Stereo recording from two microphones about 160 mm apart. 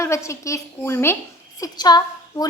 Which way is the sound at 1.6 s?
25° left (ahead or behind).